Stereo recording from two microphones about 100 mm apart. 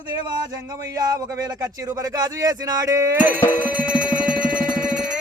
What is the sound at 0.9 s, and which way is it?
Speech, 35° right (ahead or behind).